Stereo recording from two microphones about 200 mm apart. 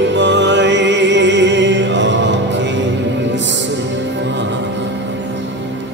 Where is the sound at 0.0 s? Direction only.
65° right (ahead or behind).